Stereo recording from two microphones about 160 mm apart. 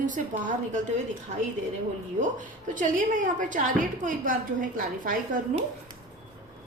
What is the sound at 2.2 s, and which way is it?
A woman's voice, 55° right (ahead or behind).